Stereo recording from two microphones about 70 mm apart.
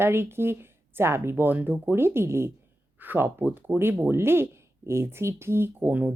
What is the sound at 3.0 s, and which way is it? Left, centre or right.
Speech, right.